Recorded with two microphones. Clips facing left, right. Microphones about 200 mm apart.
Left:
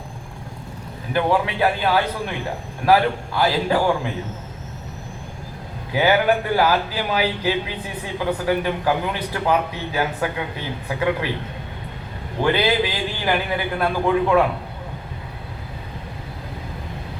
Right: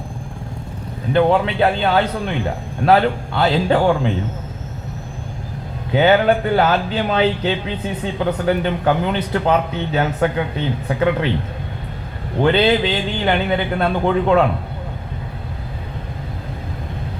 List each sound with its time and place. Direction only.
1.1 s speech: 25° right (ahead or behind)
5.9 s speech: 25° right (ahead or behind)
12.4 s speech: 25° right (ahead or behind)